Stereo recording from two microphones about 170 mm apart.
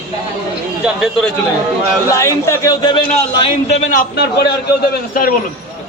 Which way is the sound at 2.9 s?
40° left (ahead or behind).